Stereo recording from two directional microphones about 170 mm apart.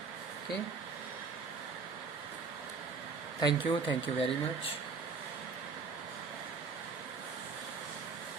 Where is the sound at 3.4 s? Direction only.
25° left (ahead or behind).